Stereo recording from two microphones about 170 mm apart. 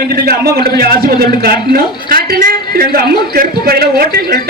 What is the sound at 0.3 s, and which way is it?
A man's voice, 65° right (ahead or behind).